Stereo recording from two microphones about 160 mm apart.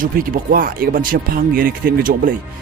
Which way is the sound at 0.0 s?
60° right (ahead or behind).